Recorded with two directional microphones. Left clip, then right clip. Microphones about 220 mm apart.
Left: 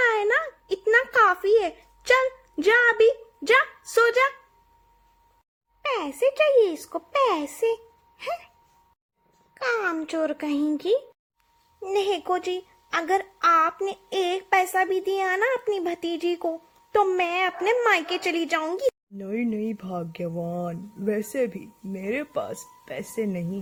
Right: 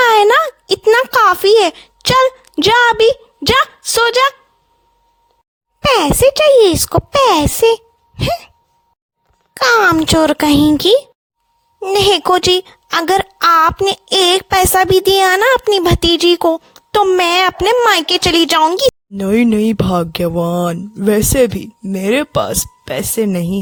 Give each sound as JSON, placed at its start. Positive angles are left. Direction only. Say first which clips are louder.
{"t": 0.0, "sound": "a sound", "louder": "right 13 dB", "side_deg": -50}
{"t": 5.8, "sound": "a woman's voice", "louder": "right 14 dB", "side_deg": -50}
{"t": 9.6, "sound": "a woman's voice", "louder": "right 16 dB", "side_deg": -50}